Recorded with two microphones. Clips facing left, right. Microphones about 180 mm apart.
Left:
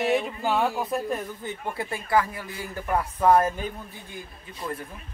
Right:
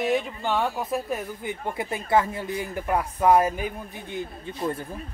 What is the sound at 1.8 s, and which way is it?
Speech, 20° right (ahead or behind).